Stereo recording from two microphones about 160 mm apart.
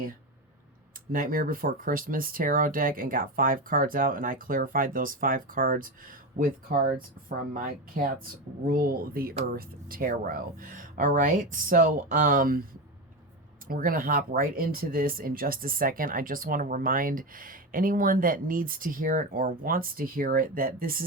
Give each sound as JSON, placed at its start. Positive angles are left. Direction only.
{"t": 1.1, "sound": "speech", "side_deg": -60}
{"t": 13.7, "sound": "speech", "side_deg": -65}